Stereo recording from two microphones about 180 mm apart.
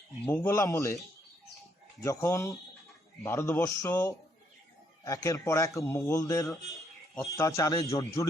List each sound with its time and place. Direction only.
0.3 s a man's voice: 10° left (ahead or behind)
2.0 s a man's voice: 15° left (ahead or behind)